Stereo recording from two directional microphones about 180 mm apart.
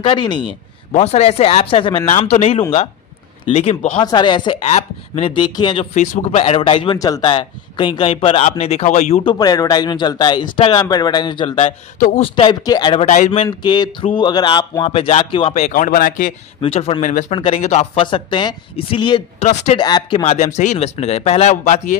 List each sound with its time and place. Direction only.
0.0 s speech: 25° left (ahead or behind)
0.9 s speech: 35° left (ahead or behind)
2.0 s speech: 40° left (ahead or behind)
4.0 s speech: 25° left (ahead or behind)
4.6 s speech: 35° left (ahead or behind)
5.9 s speech: 40° left (ahead or behind); by 13.0 s 25° left (ahead or behind)
13.1 s speech: 40° left (ahead or behind)
13.5 s speech: 25° left (ahead or behind)
15.7 s speech: 50° left (ahead or behind)
16.6 s speech: 35° left (ahead or behind)
17.3 s speech: 35° left (ahead or behind)
19.4 s speech: 40° left (ahead or behind)
19.8 s speech: 25° left (ahead or behind)